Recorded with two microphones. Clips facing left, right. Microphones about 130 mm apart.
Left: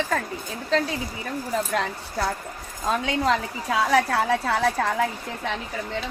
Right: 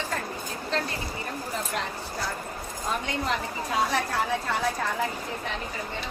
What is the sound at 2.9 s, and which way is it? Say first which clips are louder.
A woman's voice: left 7 dB; 90° left.